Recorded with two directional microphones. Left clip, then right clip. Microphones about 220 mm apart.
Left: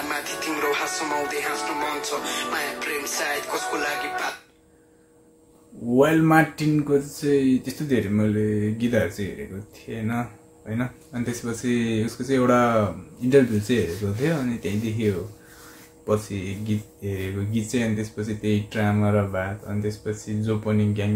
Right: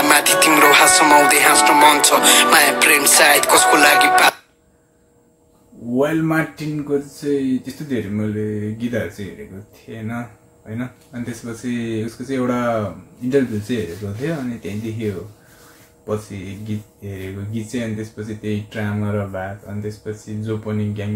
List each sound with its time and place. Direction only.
0.0 s speech: 45° right (ahead or behind)
5.9 s speech: 20° left (ahead or behind)
11.4 s speech: 20° left (ahead or behind)